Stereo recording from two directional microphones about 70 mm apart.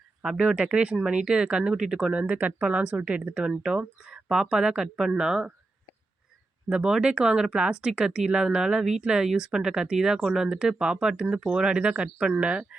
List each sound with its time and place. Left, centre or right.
0.2 s speech: centre
6.7 s speech: centre